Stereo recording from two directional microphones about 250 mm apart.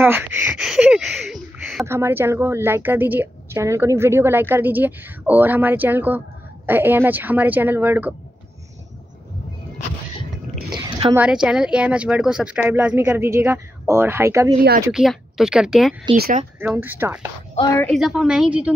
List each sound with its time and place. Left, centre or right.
0.0 s speech: centre
10.7 s a sound: right
11.1 s speech: centre
16.2 s speech: right
16.5 s speech: centre